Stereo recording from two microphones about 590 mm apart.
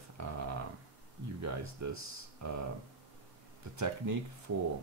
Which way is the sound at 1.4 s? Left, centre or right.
Right.